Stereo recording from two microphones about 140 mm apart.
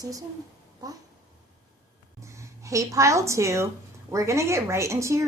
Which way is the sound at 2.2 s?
20° right (ahead or behind).